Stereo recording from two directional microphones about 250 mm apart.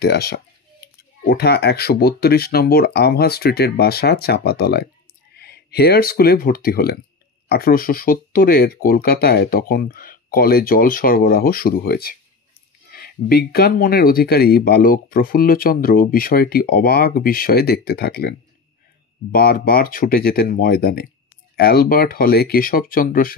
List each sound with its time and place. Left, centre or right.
0.0 s speech: left
19.3 s speech: left